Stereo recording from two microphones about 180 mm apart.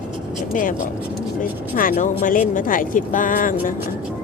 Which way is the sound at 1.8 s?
50° left (ahead or behind).